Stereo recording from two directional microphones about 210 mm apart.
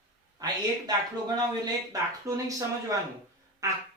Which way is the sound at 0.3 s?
20° right (ahead or behind).